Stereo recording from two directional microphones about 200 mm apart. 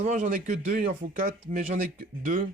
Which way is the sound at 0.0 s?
40° right (ahead or behind).